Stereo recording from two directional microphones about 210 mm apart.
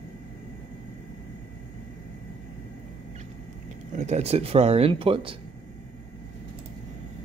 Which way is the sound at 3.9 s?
35° right (ahead or behind).